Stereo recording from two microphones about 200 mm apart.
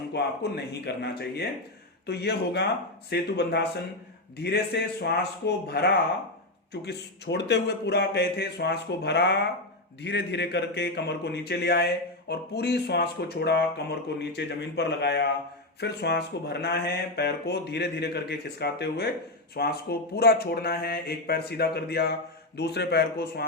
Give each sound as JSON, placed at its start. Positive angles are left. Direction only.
{"t": 0.1, "sound": "speech", "side_deg": 55}